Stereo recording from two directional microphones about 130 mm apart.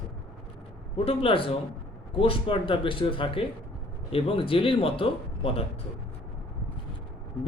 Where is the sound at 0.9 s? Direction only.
45° left (ahead or behind).